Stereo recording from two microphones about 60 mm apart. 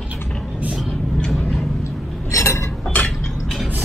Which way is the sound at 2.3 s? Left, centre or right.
Left.